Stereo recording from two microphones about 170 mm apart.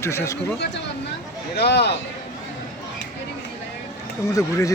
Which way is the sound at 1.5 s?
75° left (ahead or behind).